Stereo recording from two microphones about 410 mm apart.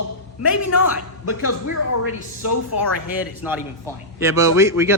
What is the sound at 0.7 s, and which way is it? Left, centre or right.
A woman's voice, left.